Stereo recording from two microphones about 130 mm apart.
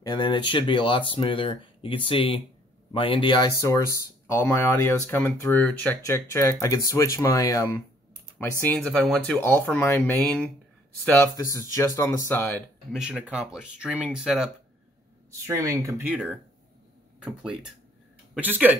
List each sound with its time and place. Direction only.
0.0 s speech: 35° left (ahead or behind)
3.6 s speech: 25° left (ahead or behind)
6.0 s speech: 25° left (ahead or behind)
8.4 s speech: 15° left (ahead or behind)
11.3 s speech: 25° left (ahead or behind)
12.9 s speech: 5° right (ahead or behind)
15.4 s speech: 25° right (ahead or behind)
16.0 s speech: 10° right (ahead or behind)